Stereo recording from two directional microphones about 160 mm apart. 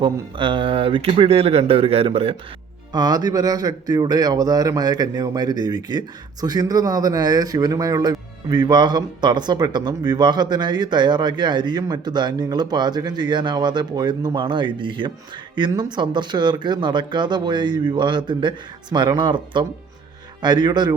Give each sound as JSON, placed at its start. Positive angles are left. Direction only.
{"t": 0.0, "sound": "speech", "side_deg": -30}
{"t": 2.9, "sound": "a man's voice", "side_deg": -25}